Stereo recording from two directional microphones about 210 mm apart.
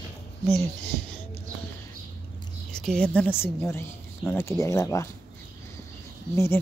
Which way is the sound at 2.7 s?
5° left (ahead or behind).